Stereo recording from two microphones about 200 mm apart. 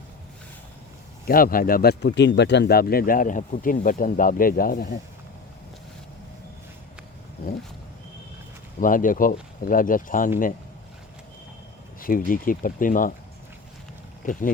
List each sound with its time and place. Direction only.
1.3 s speech: 45° left (ahead or behind)
8.8 s speech: 40° left (ahead or behind)
11.9 s speech: 45° left (ahead or behind)
14.2 s speech: 40° left (ahead or behind)